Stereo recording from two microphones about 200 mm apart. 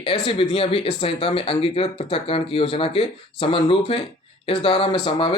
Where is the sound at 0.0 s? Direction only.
25° left (ahead or behind).